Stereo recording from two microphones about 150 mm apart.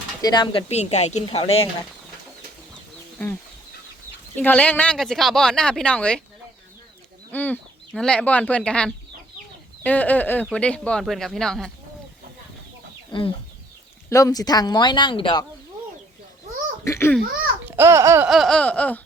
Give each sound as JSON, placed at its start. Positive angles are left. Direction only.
{"t": 0.2, "sound": "speech", "side_deg": 25}
{"t": 0.7, "sound": "speech", "side_deg": 45}
{"t": 4.4, "sound": "speech", "side_deg": 10}
{"t": 7.3, "sound": "speech", "side_deg": 10}
{"t": 9.8, "sound": "a sound", "side_deg": 10}
{"t": 11.0, "sound": "speech", "side_deg": 0}
{"t": 14.1, "sound": "speech", "side_deg": 20}
{"t": 16.8, "sound": "a sound", "side_deg": 20}
{"t": 17.7, "sound": "babbling", "side_deg": -15}
{"t": 18.3, "sound": "a sound", "side_deg": 0}